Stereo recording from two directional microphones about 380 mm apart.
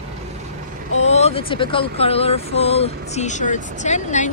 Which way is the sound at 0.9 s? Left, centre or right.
Centre.